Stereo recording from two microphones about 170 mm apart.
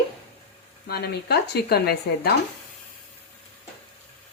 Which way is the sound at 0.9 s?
70° left (ahead or behind).